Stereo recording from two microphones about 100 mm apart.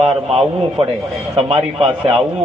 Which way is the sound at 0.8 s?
70° right (ahead or behind).